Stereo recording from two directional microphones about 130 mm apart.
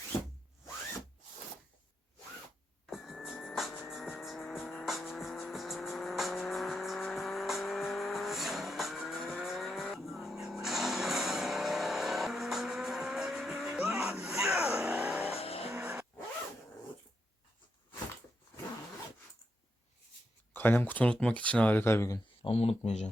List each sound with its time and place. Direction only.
2.8 s music: centre (ahead or behind)
15.4 s vehicle: 50° left (ahead or behind)
15.8 s vehicle: 15° right (ahead or behind)
20.5 s speech: 15° left (ahead or behind)
22.4 s speech: 50° left (ahead or behind)